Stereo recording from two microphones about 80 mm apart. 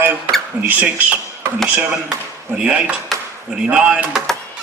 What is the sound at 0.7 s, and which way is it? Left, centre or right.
Speech, centre.